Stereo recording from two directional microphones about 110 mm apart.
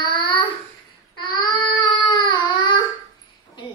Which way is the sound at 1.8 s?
45° left (ahead or behind).